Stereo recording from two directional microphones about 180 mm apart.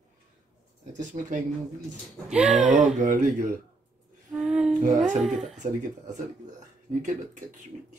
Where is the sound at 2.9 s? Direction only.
45° right (ahead or behind).